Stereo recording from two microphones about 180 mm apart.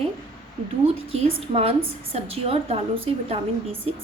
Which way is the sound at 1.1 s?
35° right (ahead or behind).